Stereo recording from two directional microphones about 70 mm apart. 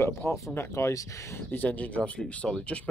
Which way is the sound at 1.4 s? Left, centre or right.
Left.